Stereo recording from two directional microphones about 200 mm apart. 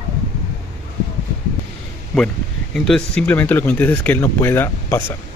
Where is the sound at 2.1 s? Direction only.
5° left (ahead or behind).